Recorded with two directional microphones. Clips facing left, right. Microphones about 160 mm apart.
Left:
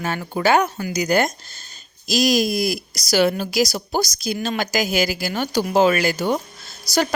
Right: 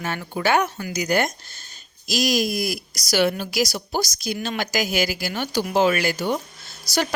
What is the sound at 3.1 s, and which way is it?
Speech, 40° left (ahead or behind).